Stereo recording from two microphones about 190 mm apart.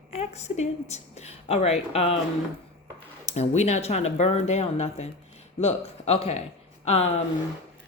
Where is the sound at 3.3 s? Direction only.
35° left (ahead or behind).